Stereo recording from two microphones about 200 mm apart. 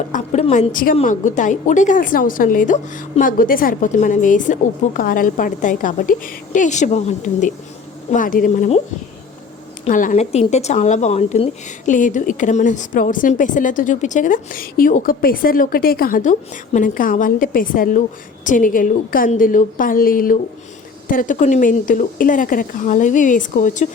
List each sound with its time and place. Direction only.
0.1 s speech: 35° left (ahead or behind)
9.8 s a woman's voice: 40° left (ahead or behind)